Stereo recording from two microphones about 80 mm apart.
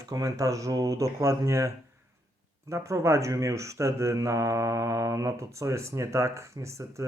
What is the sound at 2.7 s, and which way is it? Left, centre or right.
Speech, right.